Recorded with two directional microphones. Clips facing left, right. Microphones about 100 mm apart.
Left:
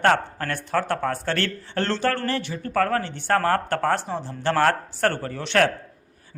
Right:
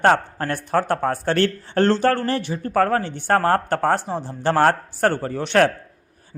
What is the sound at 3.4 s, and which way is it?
Speech, 30° right (ahead or behind).